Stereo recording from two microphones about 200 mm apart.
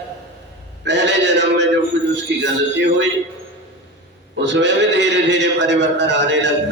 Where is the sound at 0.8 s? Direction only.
60° right (ahead or behind).